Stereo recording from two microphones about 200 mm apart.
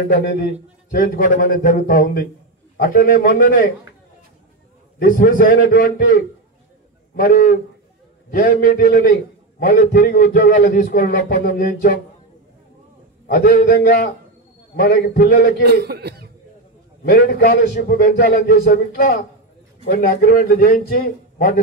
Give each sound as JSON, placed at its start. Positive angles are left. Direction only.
{"t": 0.1, "sound": "a man's voice", "side_deg": 55}
{"t": 4.9, "sound": "a man's voice", "side_deg": 45}
{"t": 7.2, "sound": "a man's voice", "side_deg": 45}
{"t": 13.3, "sound": "a man's voice", "side_deg": 45}
{"t": 15.6, "sound": "a man's voice", "side_deg": -55}
{"t": 17.0, "sound": "a man's voice", "side_deg": 50}